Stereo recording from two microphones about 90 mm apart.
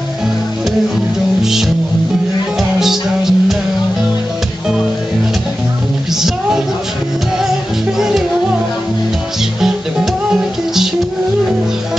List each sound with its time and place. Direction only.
1.4 s music: 5° right (ahead or behind)
2.8 s music: 5° right (ahead or behind)
9.6 s music: 5° right (ahead or behind)